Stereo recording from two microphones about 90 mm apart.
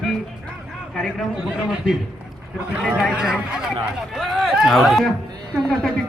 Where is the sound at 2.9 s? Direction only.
10° right (ahead or behind).